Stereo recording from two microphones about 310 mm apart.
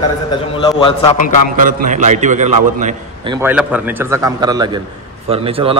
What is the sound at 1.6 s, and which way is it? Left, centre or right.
A man's voice, right.